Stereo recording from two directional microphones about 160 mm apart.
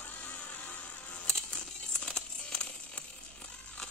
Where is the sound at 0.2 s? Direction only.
10° left (ahead or behind).